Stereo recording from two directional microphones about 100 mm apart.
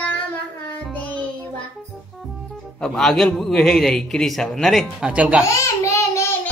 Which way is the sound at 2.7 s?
5° left (ahead or behind).